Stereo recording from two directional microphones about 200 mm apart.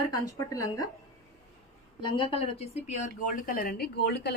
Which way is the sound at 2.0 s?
25° left (ahead or behind).